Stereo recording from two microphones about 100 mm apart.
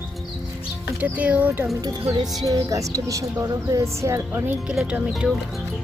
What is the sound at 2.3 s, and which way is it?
Speech, 35° right (ahead or behind).